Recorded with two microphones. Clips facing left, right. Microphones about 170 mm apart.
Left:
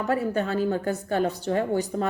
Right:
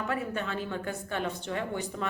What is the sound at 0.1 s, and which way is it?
A woman's voice, 40° left (ahead or behind).